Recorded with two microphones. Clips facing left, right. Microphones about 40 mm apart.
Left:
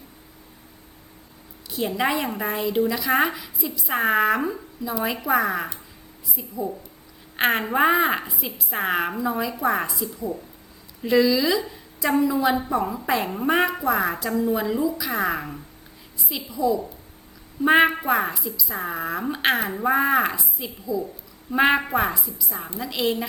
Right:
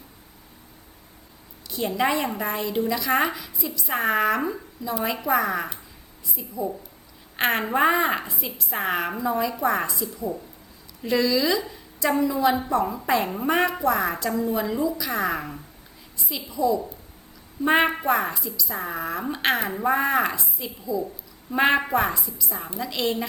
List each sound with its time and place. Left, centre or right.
2.0 s a woman's voice: centre
3.9 s a woman's voice: centre
4.2 s a woman's voice: centre
7.3 s a woman's voice: centre
7.7 s a woman's voice: centre
11.0 s a woman's voice: centre